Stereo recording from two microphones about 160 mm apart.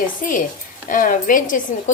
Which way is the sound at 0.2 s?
55° left (ahead or behind).